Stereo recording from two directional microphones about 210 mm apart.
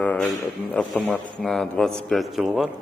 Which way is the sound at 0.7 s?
5° left (ahead or behind).